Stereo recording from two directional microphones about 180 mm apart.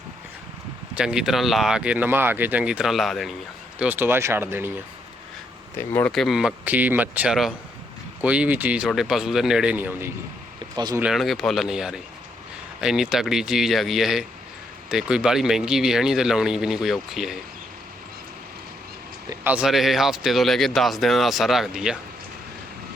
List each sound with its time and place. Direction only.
0.9 s speech: 5° right (ahead or behind)
3.8 s speech: 10° right (ahead or behind)
5.7 s speech: 10° left (ahead or behind); by 10.1 s 10° right (ahead or behind)
10.8 s speech: 25° right (ahead or behind)
11.0 s speech: centre (ahead or behind)
19.5 s speech: 5° right (ahead or behind)